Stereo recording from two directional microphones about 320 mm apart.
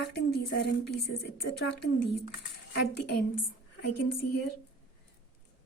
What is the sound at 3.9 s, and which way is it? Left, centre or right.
Speech, left.